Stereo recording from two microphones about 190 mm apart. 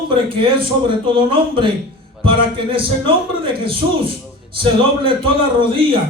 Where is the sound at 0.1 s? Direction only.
25° right (ahead or behind).